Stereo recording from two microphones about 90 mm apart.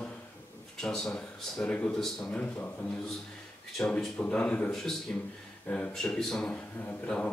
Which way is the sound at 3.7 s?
5° left (ahead or behind).